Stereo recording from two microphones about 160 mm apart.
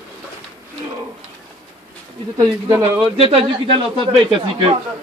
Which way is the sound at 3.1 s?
40° right (ahead or behind).